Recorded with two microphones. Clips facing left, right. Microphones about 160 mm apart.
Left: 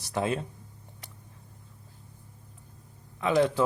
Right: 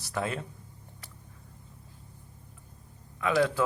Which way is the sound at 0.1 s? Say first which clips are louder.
Left 4 dB; 20° left (ahead or behind).